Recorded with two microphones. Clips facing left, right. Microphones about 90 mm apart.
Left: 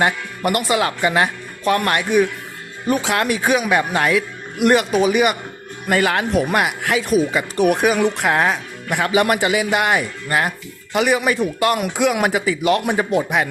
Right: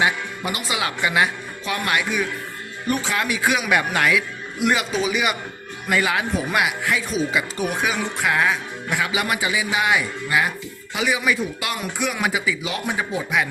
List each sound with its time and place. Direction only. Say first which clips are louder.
0.0 s speech: left 3 dB; 55° left (ahead or behind)
3.0 s speech: left 4 dB; 75° left (ahead or behind)
3.2 s speech: left 3 dB; 45° left (ahead or behind)
4.6 s speech: left 6 dB; 55° left (ahead or behind); by 12.2 s 80° left
12.2 s speech: left 5 dB; 50° left (ahead or behind)